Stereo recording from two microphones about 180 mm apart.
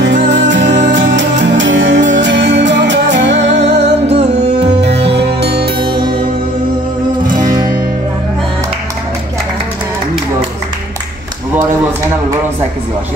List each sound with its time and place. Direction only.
0.3 s music: 80° right
3.6 s music: 35° right (ahead or behind)
4.8 s music: 70° right (ahead or behind)
5.8 s music: 30° right (ahead or behind)